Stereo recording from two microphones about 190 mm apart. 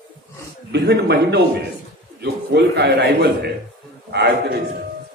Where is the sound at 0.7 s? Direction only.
60° right (ahead or behind).